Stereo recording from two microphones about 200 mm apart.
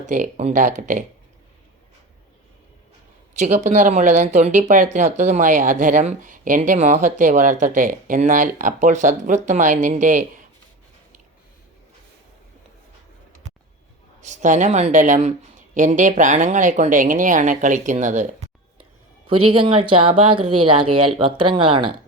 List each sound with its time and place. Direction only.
0.0 s speech: 40° right (ahead or behind)
3.3 s speech: 35° right (ahead or behind)
14.2 s speech: 35° right (ahead or behind)
19.5 s speech: 25° right (ahead or behind)